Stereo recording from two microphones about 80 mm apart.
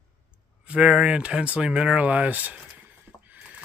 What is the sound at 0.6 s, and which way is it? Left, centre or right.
Speech, centre.